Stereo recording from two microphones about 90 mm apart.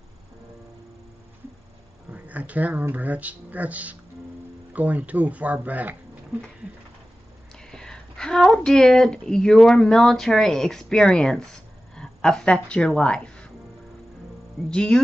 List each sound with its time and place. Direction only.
2.1 s speech: 15° right (ahead or behind)
7.5 s speech: 5° left (ahead or behind)
11.9 s a sound: 5° left (ahead or behind)
12.5 s speech: 10° left (ahead or behind)
14.7 s speech: 10° left (ahead or behind)